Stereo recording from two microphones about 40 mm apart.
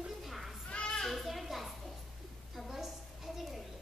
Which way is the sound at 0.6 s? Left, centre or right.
Left.